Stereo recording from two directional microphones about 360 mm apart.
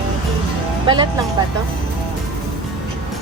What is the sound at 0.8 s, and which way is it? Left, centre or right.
Speech, centre.